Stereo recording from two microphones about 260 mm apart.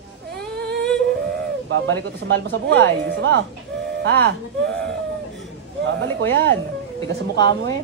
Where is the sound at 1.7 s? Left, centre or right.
Right.